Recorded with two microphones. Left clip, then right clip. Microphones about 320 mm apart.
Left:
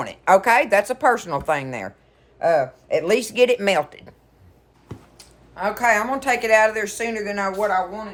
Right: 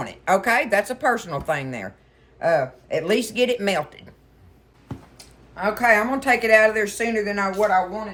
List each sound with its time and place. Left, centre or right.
0.0 s speech: centre
5.1 s speech: centre